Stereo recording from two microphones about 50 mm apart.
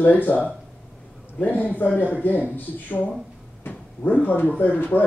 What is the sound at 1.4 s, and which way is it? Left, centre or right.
Speech, left.